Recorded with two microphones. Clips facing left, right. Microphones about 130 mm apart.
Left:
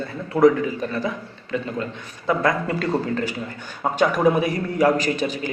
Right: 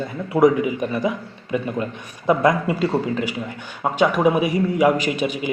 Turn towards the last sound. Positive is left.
turn(degrees=-15)  # may be behind; listen again after turning